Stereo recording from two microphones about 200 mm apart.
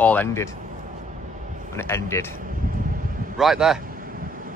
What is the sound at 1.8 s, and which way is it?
Speech, 15° left (ahead or behind).